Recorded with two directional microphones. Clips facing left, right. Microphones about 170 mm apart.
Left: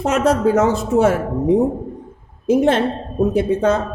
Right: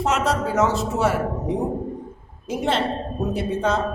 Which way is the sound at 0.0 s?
55° left (ahead or behind).